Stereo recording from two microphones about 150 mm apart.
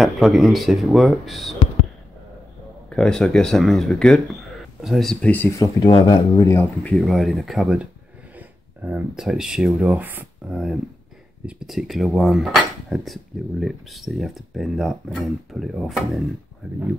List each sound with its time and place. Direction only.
0.0 s speech: centre (ahead or behind)
2.9 s speech: 5° left (ahead or behind)
5.6 s speech: 30° left (ahead or behind)
6.5 s speech: 10° left (ahead or behind)
8.4 s a sound: 15° right (ahead or behind)
9.1 s speech: 5° right (ahead or behind)